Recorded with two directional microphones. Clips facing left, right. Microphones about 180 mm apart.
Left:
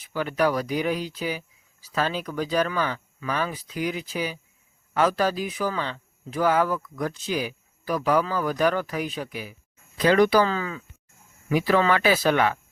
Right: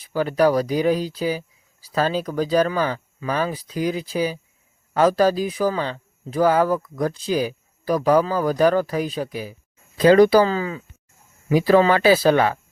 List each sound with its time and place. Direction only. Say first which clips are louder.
0.0 s speech: right 5 dB; 35° right (ahead or behind)